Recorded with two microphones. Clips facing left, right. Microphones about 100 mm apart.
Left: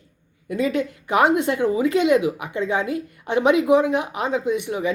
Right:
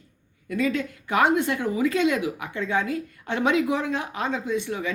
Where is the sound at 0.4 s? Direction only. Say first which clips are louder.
Left 3 dB; 20° left (ahead or behind).